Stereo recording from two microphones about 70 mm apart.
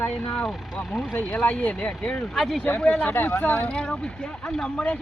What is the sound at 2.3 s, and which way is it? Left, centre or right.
Speech, centre.